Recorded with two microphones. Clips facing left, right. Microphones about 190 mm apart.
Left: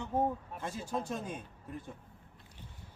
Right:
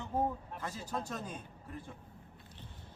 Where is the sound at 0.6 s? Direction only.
25° left (ahead or behind).